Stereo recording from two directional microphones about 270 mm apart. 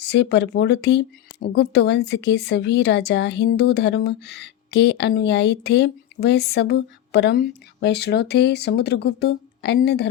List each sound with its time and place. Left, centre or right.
0.0 s speech: left